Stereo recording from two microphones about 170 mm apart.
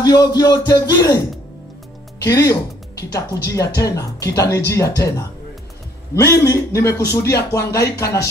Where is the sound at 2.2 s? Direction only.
20° left (ahead or behind).